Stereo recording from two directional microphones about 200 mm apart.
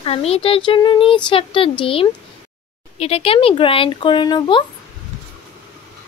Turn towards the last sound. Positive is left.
turn(degrees=25)  # may be behind; listen again after turning